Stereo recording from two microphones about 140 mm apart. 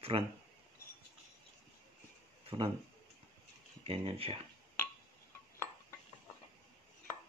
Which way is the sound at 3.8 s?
45° right (ahead or behind).